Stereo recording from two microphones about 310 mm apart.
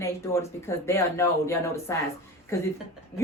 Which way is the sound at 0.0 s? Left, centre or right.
Centre.